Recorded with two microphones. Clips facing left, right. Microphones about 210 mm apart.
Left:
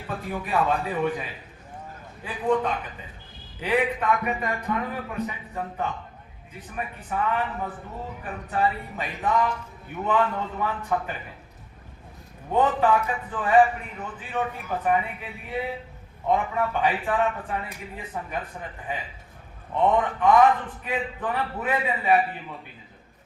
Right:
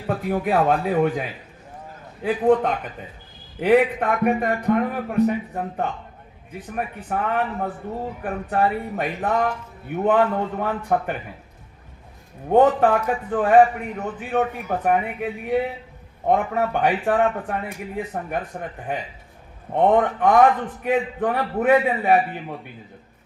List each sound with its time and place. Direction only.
0.4 s a man's voice: 65° right (ahead or behind)
12.5 s a man's voice: 55° right (ahead or behind)